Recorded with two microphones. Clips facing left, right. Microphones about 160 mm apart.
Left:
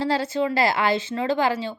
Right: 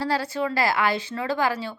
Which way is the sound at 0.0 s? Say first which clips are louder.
Left 3 dB; 20° left (ahead or behind).